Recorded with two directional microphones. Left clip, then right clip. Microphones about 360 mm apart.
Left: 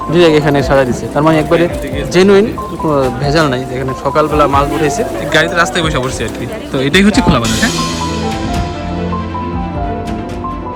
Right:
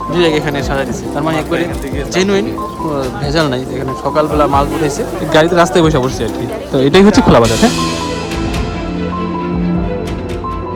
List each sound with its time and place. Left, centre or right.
0.1 s a man's voice: centre